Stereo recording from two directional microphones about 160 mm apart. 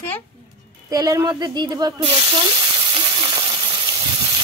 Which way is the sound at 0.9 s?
20° right (ahead or behind).